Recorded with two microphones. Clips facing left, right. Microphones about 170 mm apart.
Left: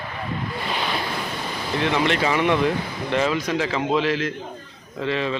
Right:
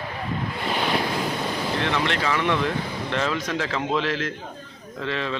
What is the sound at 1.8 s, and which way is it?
Speech, 15° left (ahead or behind).